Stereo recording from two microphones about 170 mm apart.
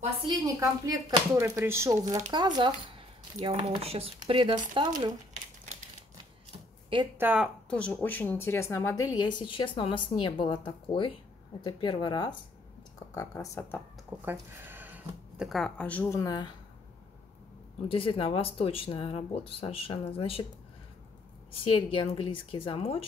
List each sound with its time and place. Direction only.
0.3 s speech: 20° right (ahead or behind)
7.2 s speech: 5° right (ahead or behind)
7.7 s speech: 10° left (ahead or behind)
14.1 s speech: 10° right (ahead or behind); by 16.4 s 20° left (ahead or behind)
17.8 s speech: 30° left (ahead or behind)
21.6 s speech: 30° left (ahead or behind)